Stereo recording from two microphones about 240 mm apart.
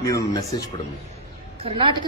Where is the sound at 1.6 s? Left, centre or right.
Right.